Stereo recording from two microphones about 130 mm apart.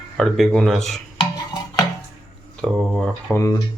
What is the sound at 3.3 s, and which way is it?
Speech, 25° left (ahead or behind).